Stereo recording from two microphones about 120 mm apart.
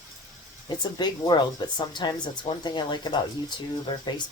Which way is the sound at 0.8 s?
35° left (ahead or behind).